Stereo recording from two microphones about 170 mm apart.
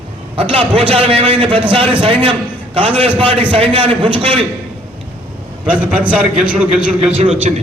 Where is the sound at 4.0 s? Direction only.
30° right (ahead or behind).